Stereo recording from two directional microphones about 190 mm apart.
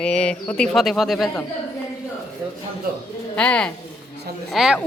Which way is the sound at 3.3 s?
5° left (ahead or behind).